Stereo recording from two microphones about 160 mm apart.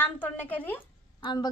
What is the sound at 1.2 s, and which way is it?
Speech, 25° left (ahead or behind).